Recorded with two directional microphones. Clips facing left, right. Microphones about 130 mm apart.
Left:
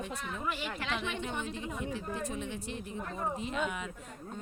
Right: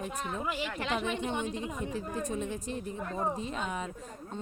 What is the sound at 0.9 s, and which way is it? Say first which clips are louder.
Speech: right 4 dB; 40° right (ahead or behind).